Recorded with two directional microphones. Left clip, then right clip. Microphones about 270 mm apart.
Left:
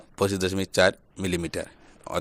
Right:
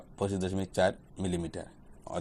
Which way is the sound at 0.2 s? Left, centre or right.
Left.